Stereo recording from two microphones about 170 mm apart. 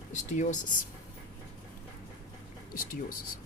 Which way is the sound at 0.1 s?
45° left (ahead or behind).